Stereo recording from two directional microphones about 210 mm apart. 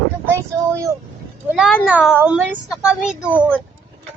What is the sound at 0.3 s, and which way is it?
Vehicle, 15° right (ahead or behind).